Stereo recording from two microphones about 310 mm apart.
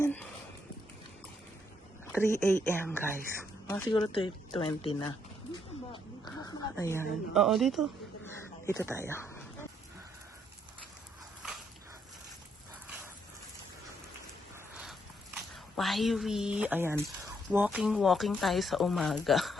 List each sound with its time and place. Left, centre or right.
0.0 s a sound: centre
2.3 s speech: centre
6.7 s speech: centre
9.0 s dog: centre
15.4 s speech: centre